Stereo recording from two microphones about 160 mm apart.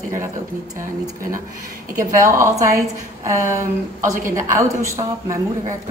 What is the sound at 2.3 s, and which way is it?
A woman's voice, 20° right (ahead or behind).